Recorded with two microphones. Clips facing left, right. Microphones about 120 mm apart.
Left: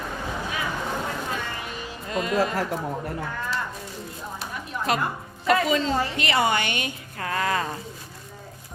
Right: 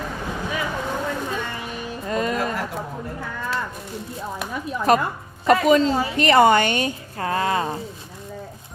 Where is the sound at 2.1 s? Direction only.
40° right (ahead or behind).